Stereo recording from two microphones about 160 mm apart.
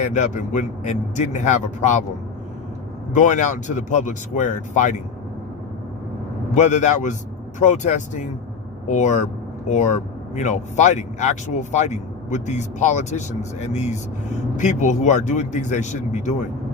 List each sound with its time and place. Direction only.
0.0 s speech: 50° left (ahead or behind)
3.2 s speech: 50° left (ahead or behind)
6.5 s speech: 50° left (ahead or behind)